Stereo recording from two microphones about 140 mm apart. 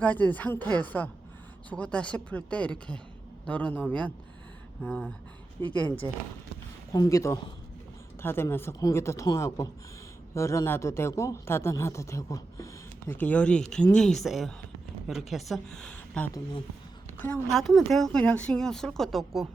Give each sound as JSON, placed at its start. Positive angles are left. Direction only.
{"t": 0.0, "sound": "speech", "side_deg": 10}
{"t": 4.8, "sound": "speech", "side_deg": -5}
{"t": 5.6, "sound": "speech", "side_deg": 15}
{"t": 6.9, "sound": "speech", "side_deg": 25}
{"t": 13.1, "sound": "a woman's voice", "side_deg": 10}